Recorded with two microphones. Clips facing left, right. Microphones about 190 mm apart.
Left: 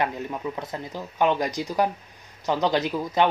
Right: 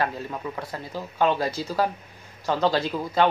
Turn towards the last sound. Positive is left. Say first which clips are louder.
# even
turn(degrees=15)  # may be behind; listen again after turning